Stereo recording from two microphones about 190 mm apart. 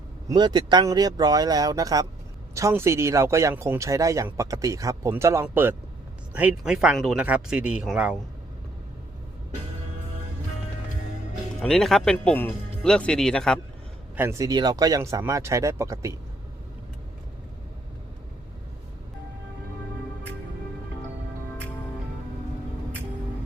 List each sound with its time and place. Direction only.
0.3 s speech: 20° right (ahead or behind); by 8.2 s 5° right (ahead or behind)
11.6 s speech: centre (ahead or behind)
14.2 s speech: 15° right (ahead or behind)